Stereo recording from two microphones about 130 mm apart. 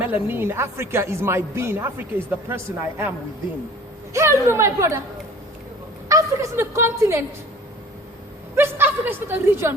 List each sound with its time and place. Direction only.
0.0 s a woman's voice: 15° right (ahead or behind)
4.1 s a woman's voice: 20° right (ahead or behind)
6.1 s a woman's voice: 25° right (ahead or behind)
8.5 s a woman's voice: 15° right (ahead or behind)